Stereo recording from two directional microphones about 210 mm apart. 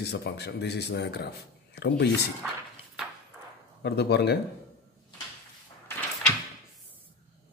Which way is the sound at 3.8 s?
50° left (ahead or behind).